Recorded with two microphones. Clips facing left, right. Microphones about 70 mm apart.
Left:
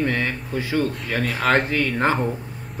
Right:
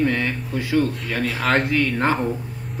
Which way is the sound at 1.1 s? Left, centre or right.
Centre.